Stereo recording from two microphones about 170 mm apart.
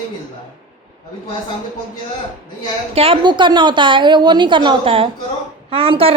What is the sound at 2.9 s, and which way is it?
A woman's voice, 35° right (ahead or behind).